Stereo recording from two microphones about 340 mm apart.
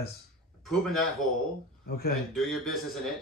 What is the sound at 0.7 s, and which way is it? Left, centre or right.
Speech, centre.